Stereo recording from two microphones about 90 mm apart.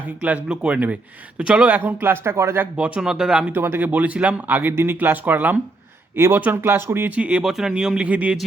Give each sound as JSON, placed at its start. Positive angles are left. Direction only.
{"t": 0.4, "sound": "speech", "side_deg": -10}
{"t": 2.7, "sound": "speech", "side_deg": -15}
{"t": 3.5, "sound": "speech", "side_deg": -25}
{"t": 7.1, "sound": "speech", "side_deg": -15}